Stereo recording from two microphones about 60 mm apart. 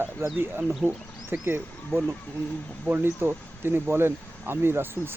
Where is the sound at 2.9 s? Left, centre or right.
Right.